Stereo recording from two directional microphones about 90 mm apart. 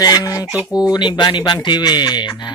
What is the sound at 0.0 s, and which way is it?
Speech, 40° left (ahead or behind).